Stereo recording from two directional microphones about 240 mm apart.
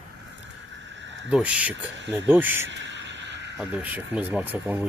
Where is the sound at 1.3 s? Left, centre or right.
Centre.